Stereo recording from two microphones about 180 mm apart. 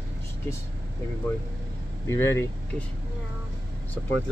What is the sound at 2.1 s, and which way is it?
Speech, 15° left (ahead or behind).